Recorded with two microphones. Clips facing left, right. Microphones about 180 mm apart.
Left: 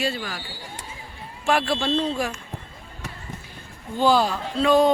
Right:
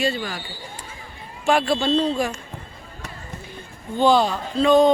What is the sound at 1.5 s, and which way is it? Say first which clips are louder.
Speech: right 3 dB; centre (ahead or behind).